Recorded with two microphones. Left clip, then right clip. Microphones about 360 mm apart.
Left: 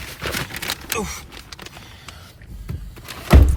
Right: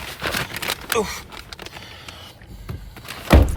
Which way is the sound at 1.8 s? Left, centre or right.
Centre.